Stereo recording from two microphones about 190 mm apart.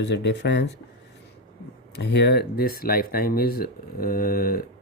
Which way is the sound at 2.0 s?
65° left (ahead or behind).